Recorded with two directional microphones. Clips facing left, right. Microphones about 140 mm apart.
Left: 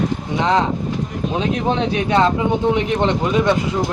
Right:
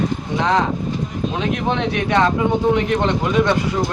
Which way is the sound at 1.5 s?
30° left (ahead or behind).